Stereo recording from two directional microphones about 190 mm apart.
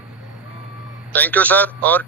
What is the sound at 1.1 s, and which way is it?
Speech, 10° left (ahead or behind).